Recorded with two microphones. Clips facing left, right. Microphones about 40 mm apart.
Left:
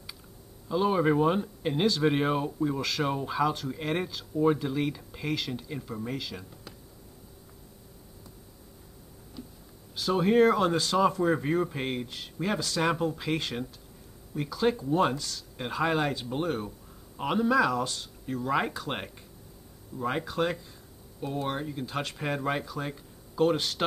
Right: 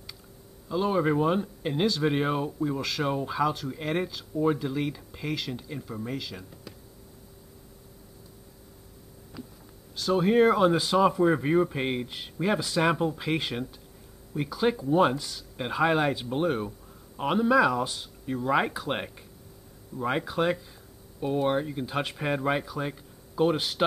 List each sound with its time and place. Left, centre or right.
0.7 s speech: centre
9.9 s speech: centre